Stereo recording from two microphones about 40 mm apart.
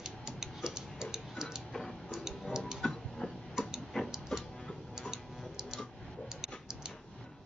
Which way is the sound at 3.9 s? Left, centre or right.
Centre.